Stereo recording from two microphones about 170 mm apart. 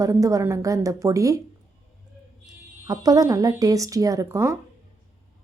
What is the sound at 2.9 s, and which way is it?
A woman's voice, 20° right (ahead or behind).